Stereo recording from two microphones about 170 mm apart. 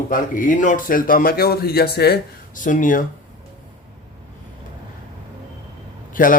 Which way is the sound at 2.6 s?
50° left (ahead or behind).